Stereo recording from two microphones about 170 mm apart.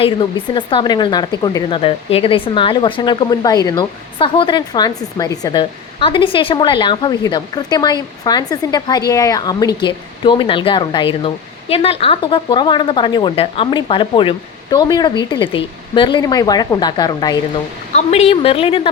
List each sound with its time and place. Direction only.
0.0 s speech: 30° left (ahead or behind)
17.9 s a woman's voice: 40° left (ahead or behind)